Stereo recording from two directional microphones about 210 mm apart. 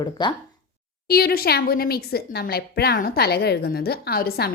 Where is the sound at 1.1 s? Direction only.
45° left (ahead or behind).